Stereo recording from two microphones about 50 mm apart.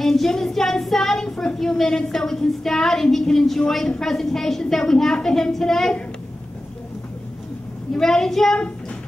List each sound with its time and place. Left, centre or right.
0.0 s child singing: centre
7.9 s child singing: centre